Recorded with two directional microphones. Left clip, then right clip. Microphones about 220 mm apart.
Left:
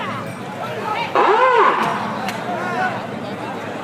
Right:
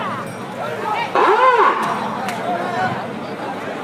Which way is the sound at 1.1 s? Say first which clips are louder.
Even; 50° right (ahead or behind).